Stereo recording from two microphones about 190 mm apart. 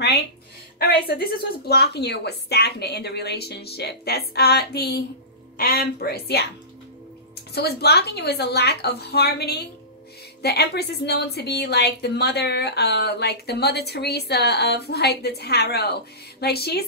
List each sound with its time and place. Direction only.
0.7 s a woman's voice: 55° left (ahead or behind)
7.5 s a woman's voice: 55° left (ahead or behind)